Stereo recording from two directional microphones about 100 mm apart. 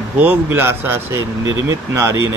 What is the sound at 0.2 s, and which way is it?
Speech, 20° right (ahead or behind).